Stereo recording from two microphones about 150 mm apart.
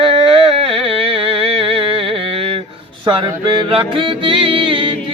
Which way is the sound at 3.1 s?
30° right (ahead or behind).